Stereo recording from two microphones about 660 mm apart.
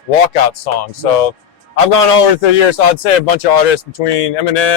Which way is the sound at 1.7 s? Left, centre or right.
Left.